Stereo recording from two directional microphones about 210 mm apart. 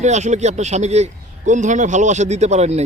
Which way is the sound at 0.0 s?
35° right (ahead or behind).